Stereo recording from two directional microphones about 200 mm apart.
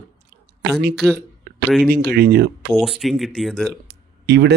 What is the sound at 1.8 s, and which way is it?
Speech, 50° right (ahead or behind).